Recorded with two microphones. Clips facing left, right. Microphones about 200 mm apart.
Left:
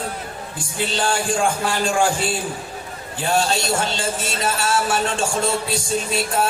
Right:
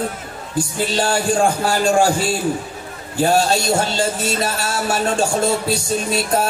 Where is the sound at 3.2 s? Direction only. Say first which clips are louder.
Right 5 dB; 40° right (ahead or behind).